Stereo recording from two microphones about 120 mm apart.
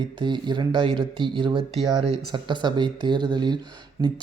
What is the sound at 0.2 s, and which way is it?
Speech, 40° right (ahead or behind).